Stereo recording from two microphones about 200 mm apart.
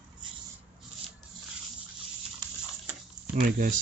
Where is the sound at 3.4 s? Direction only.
45° right (ahead or behind).